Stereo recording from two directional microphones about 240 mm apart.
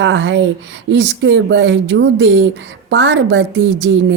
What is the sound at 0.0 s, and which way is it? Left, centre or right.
A woman's voice, right.